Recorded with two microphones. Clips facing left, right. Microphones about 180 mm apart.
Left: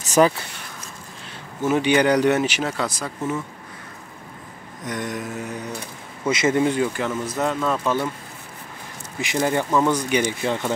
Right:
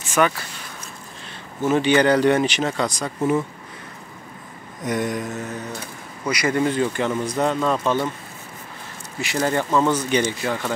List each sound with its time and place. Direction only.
0.0 s speech: 40° left (ahead or behind)
1.7 s speech: 10° left (ahead or behind)
4.8 s speech: 5° right (ahead or behind); by 5.7 s 15° left (ahead or behind)
6.2 s speech: 25° left (ahead or behind)
7.0 s speech: 5° left (ahead or behind)
9.2 s speech: 15° left (ahead or behind)